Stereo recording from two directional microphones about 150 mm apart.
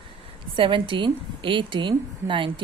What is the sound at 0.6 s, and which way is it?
A woman's voice, 35° right (ahead or behind).